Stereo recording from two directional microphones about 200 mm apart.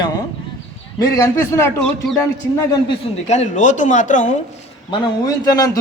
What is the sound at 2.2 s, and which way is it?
Speech, 15° left (ahead or behind).